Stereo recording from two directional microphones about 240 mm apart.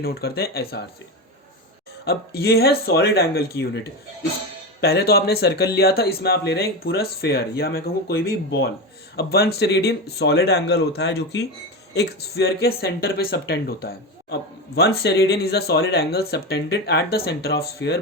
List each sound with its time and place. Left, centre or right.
0.0 s speech: left
2.0 s speech: left
4.8 s speech: left